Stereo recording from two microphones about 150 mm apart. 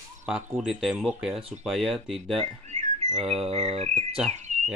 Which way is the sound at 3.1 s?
Centre (ahead or behind).